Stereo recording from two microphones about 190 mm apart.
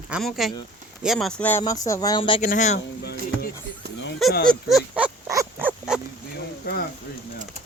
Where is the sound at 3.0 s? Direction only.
60° left (ahead or behind).